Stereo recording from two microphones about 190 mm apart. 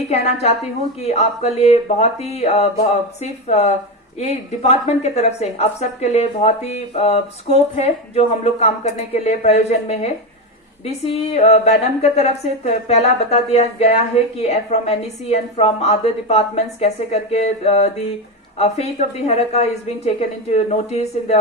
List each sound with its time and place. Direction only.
0.1 s speech: 35° left (ahead or behind)